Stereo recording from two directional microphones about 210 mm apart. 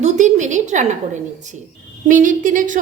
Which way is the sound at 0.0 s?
35° right (ahead or behind).